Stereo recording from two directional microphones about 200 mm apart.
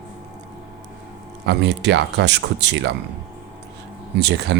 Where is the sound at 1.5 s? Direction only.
60° right (ahead or behind).